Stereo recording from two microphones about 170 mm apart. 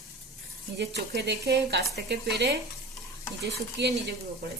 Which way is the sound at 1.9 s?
80° right.